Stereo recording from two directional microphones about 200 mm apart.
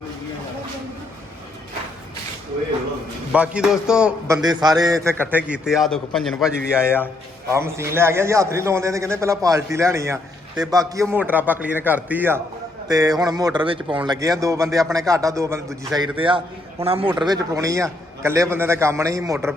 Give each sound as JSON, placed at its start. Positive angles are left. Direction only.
{"t": 3.3, "sound": "a man's voice", "side_deg": -5}
{"t": 4.4, "sound": "a man's voice", "side_deg": -20}
{"t": 16.2, "sound": "a man's voice", "side_deg": -25}